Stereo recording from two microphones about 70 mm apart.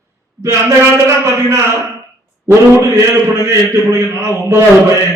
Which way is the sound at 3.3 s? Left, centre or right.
Right.